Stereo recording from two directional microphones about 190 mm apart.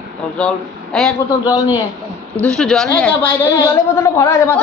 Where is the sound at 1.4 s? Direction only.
20° left (ahead or behind).